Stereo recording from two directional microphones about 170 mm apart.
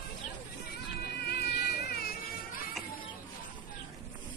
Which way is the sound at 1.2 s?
70° left (ahead or behind).